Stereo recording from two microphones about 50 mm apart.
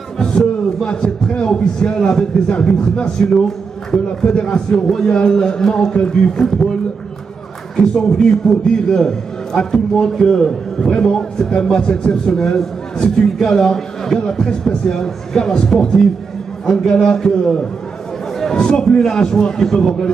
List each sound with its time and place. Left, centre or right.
0.2 s a man's voice: centre